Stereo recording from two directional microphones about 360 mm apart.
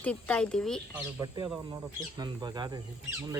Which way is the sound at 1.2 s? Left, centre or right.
Centre.